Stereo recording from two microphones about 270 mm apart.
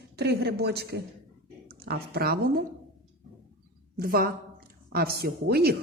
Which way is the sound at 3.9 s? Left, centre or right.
Right.